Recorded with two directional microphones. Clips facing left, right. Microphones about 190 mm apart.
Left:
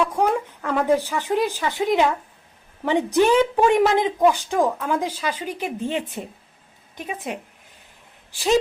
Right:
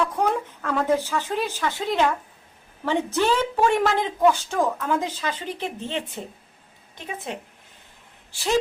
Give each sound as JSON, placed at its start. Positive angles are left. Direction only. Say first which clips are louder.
{"t": 0.0, "sound": "a woman's voice", "louder": "left 2 dB", "side_deg": 15}